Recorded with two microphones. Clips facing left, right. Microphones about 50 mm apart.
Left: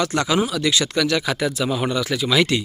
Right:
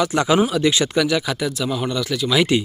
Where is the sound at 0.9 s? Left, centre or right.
Centre.